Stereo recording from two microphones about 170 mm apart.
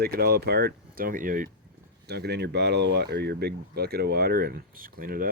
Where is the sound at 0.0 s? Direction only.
65° right (ahead or behind).